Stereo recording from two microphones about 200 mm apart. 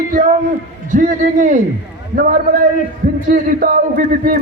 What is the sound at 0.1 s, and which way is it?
A man's voice, 40° right (ahead or behind).